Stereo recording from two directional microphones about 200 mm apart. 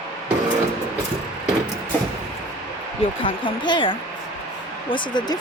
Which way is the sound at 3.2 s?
25° left (ahead or behind).